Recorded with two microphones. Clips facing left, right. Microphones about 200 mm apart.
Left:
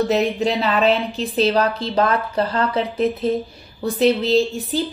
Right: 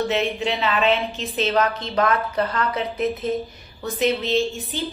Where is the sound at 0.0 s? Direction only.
40° left (ahead or behind).